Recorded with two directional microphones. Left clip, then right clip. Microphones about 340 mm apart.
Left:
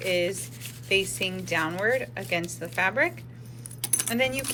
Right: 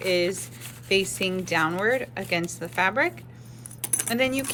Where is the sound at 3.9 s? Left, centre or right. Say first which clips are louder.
Right 1 dB; centre.